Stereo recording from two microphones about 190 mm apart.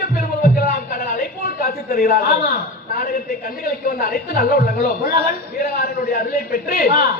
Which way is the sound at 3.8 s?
50° left (ahead or behind).